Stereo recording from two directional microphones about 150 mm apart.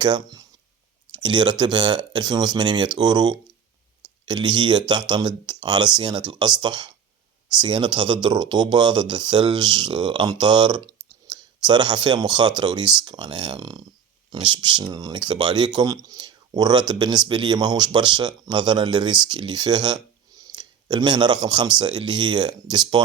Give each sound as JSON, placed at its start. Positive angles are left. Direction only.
{"t": 0.0, "sound": "speech", "side_deg": -30}